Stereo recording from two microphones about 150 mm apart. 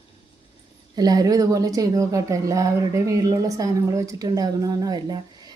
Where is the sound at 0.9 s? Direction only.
25° right (ahead or behind).